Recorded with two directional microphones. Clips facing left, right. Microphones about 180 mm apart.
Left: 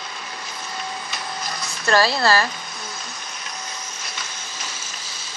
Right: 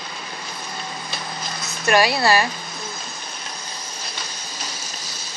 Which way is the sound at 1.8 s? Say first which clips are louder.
Right 1 dB; 15° right (ahead or behind).